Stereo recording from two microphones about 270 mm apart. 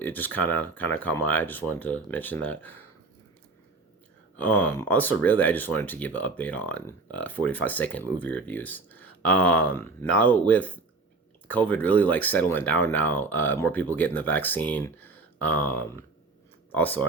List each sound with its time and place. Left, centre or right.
0.0 s speech: centre
4.4 s speech: centre